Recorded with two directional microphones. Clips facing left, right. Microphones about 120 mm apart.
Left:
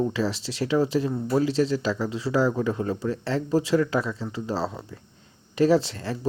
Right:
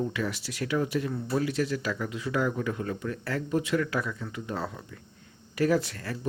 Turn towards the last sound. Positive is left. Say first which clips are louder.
# left 5 dB
turn(degrees=25)  # may be behind; listen again after turning